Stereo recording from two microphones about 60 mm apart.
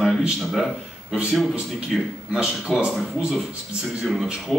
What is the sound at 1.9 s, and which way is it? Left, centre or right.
Speech, centre.